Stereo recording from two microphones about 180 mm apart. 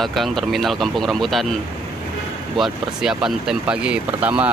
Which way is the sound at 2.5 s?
Centre (ahead or behind).